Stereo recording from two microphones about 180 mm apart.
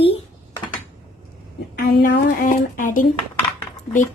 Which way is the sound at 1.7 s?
50° left (ahead or behind).